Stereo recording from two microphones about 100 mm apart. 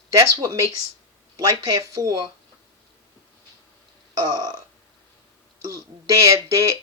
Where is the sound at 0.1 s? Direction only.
30° right (ahead or behind).